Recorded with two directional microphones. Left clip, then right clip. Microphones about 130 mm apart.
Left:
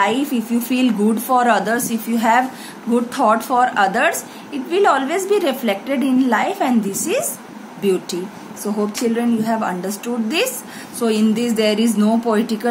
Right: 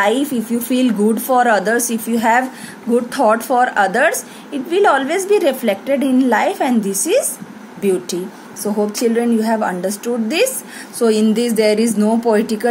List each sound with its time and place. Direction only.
0.0 s a woman's voice: 40° right (ahead or behind)
9.1 s a woman's voice: 35° right (ahead or behind)